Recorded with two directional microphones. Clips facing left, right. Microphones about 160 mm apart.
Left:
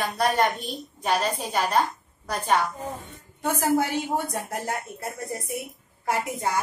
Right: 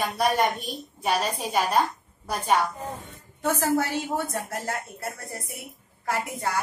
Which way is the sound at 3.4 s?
15° left (ahead or behind).